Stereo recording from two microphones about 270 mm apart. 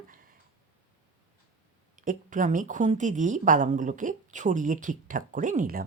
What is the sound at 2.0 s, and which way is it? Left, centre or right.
Speech, right.